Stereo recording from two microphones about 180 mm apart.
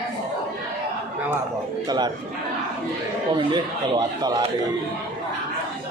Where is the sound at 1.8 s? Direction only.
25° right (ahead or behind).